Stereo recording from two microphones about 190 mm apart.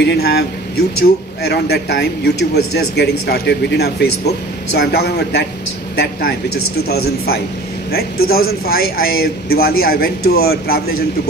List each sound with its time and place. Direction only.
0.0 s a man's voice: 60° left (ahead or behind)